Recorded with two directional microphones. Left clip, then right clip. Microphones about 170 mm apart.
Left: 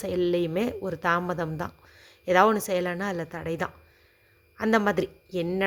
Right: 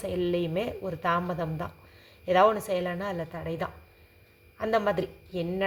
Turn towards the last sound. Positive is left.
turn(degrees=50)  # may be behind; listen again after turning